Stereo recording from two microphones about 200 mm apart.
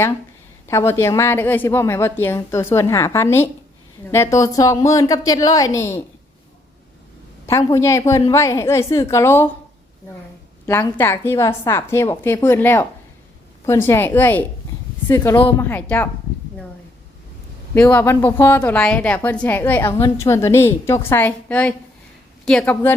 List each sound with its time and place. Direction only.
0.7 s a woman's voice: 10° left (ahead or behind)
7.7 s a woman's voice: 15° left (ahead or behind)
10.7 s a woman's voice: 10° left (ahead or behind)
17.7 s a woman's voice: 5° left (ahead or behind)